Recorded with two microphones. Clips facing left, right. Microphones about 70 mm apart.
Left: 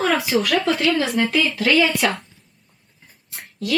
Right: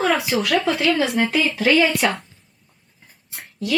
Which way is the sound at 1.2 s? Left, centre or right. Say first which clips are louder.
Even; right.